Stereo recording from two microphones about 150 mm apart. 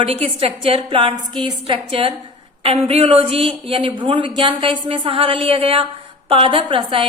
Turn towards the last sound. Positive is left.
turn(degrees=-35)  # may be behind; listen again after turning